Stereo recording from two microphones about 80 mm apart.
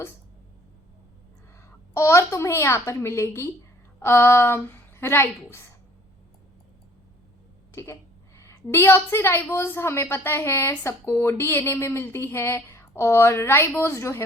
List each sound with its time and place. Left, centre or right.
1.9 s a woman's voice: left
7.7 s a woman's voice: left